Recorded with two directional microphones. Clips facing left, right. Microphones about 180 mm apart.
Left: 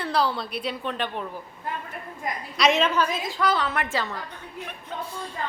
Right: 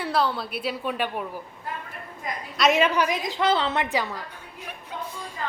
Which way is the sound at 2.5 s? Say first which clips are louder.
Even; centre (ahead or behind).